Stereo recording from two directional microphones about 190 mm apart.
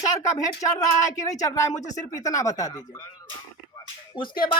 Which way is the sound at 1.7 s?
40° left (ahead or behind).